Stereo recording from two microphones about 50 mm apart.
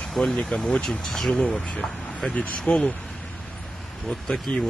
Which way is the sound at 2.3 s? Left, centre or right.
Left.